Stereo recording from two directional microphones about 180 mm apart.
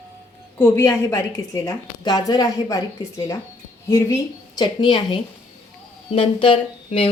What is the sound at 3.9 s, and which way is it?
A woman's voice, 15° left (ahead or behind).